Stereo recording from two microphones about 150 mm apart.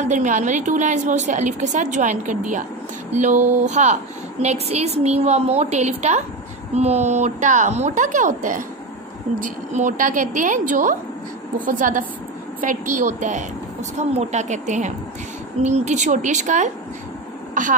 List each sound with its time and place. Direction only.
0.0 s a woman's voice: 55° right (ahead or behind)